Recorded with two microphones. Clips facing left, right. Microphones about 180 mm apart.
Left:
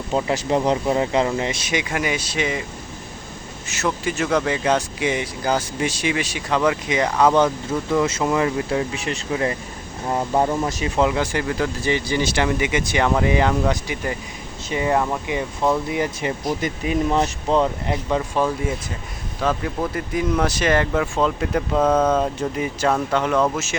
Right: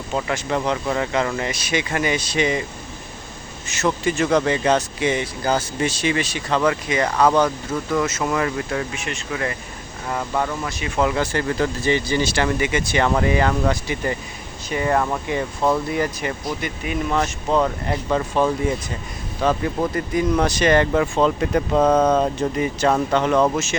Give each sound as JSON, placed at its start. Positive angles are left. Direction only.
{"t": 0.3, "sound": "speech", "side_deg": 35}
{"t": 0.9, "sound": "speech", "side_deg": 25}
{"t": 3.7, "sound": "speech", "side_deg": 5}
{"t": 7.7, "sound": "speech", "side_deg": 10}
{"t": 8.0, "sound": "speech", "side_deg": 30}
{"t": 8.3, "sound": "speech", "side_deg": 20}
{"t": 9.0, "sound": "speech", "side_deg": 35}
{"t": 10.7, "sound": "speech", "side_deg": 40}
{"t": 10.9, "sound": "speech", "side_deg": 20}
{"t": 16.2, "sound": "speech", "side_deg": 25}
{"t": 16.6, "sound": "speech", "side_deg": 35}
{"t": 21.8, "sound": "speech", "side_deg": -10}
{"t": 22.1, "sound": "speech", "side_deg": 5}